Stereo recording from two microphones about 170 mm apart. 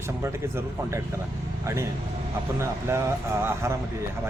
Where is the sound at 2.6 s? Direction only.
15° right (ahead or behind).